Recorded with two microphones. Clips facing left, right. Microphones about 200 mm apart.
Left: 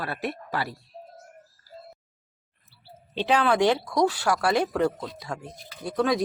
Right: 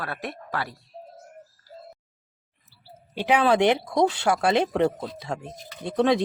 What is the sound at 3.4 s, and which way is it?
Speech, 20° right (ahead or behind).